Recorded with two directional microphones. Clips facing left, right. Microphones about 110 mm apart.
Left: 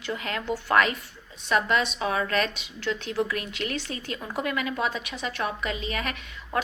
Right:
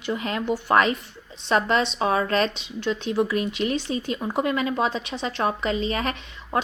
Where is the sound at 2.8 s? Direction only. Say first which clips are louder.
Right 4 dB; 20° right (ahead or behind).